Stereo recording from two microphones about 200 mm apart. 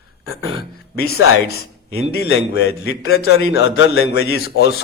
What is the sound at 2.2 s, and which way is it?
Speech, 60° left (ahead or behind).